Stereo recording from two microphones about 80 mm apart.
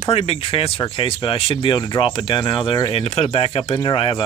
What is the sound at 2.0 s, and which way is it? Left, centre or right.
Speech, left.